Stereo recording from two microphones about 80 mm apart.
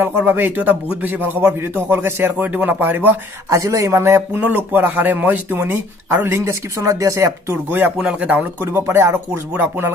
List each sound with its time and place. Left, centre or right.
0.0 s speech: right
3.4 s speech: right
4.4 s speech: right
8.0 s speech: centre
8.7 s speech: right